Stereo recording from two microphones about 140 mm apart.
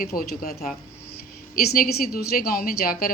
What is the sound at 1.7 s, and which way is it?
Speech, 90° left.